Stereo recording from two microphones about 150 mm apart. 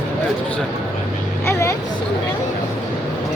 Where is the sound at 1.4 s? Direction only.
20° left (ahead or behind).